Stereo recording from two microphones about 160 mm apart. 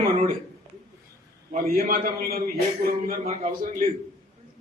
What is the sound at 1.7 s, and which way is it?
Speech, 60° right (ahead or behind).